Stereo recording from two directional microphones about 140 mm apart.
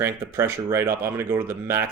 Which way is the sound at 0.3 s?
20° right (ahead or behind).